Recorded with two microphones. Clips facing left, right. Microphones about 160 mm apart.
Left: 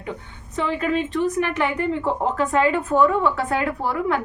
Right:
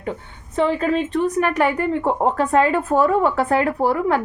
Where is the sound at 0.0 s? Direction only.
45° right (ahead or behind).